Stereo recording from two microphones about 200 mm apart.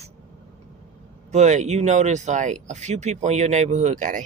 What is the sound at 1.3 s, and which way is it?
Speech, 35° right (ahead or behind).